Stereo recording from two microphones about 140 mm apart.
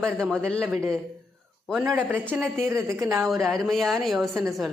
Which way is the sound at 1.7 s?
Centre (ahead or behind).